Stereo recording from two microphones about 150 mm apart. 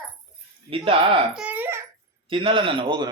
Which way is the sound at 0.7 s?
35° right (ahead or behind).